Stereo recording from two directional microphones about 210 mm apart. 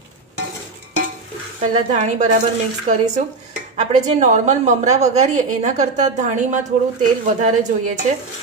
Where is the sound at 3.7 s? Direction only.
35° right (ahead or behind).